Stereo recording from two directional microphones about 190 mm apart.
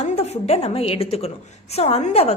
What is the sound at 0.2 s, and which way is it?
A woman's voice, 35° left (ahead or behind).